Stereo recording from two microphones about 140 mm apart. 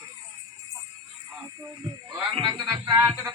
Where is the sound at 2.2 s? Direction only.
35° right (ahead or behind).